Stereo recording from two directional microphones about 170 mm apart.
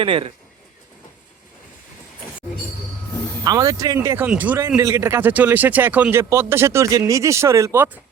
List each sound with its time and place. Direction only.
0.0 s speech: 30° right (ahead or behind)
3.4 s speech: 20° right (ahead or behind)